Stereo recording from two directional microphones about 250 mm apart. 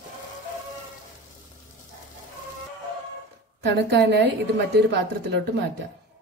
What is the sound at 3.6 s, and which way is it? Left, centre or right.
Speech, right.